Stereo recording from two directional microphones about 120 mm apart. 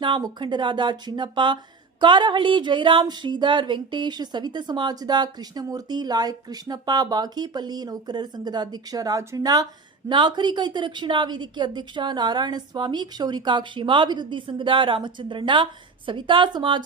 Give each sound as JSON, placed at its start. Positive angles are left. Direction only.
{"t": 0.0, "sound": "a woman's voice", "side_deg": -40}